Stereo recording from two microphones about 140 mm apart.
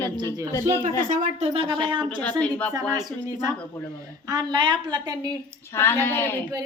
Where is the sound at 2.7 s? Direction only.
25° right (ahead or behind).